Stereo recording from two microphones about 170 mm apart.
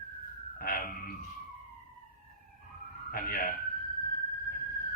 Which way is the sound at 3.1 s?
60° left (ahead or behind).